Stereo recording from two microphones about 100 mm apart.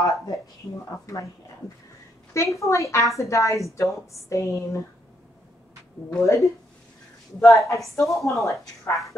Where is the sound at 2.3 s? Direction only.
30° left (ahead or behind).